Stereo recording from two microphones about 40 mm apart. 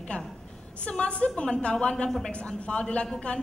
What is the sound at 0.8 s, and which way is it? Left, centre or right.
A woman's voice, left.